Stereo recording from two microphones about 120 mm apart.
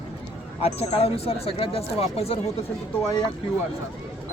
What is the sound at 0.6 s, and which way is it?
Speech, 55° left (ahead or behind).